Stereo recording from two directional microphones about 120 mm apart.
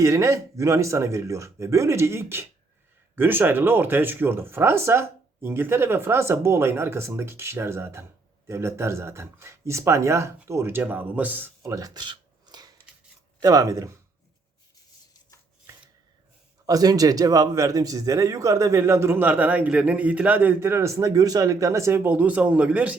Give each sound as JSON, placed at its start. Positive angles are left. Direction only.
{"t": 0.0, "sound": "a man's voice", "side_deg": -25}
{"t": 11.7, "sound": "a sound", "side_deg": -35}
{"t": 13.4, "sound": "a man's voice", "side_deg": -30}
{"t": 16.6, "sound": "a man's voice", "side_deg": -30}